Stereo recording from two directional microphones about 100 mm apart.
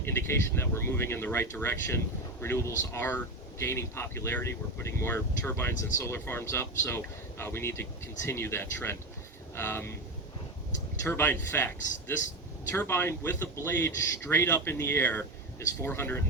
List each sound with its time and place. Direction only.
0.0 s speech: 25° left (ahead or behind)
11.0 s speech: 20° left (ahead or behind)